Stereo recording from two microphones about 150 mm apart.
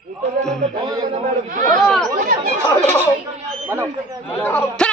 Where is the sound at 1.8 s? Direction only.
Centre (ahead or behind).